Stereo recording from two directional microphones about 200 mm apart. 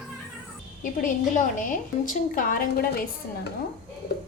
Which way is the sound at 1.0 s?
40° left (ahead or behind).